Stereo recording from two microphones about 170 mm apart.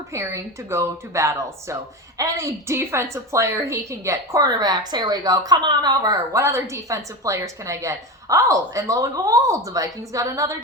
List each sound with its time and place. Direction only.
0.1 s speech: 15° right (ahead or behind)